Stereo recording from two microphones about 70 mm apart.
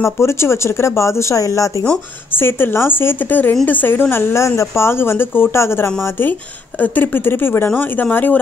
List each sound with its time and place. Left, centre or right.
0.0 s speech: left
2.3 s speech: left